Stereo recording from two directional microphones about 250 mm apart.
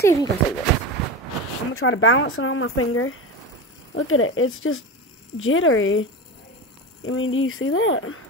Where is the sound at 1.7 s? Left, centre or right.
Left.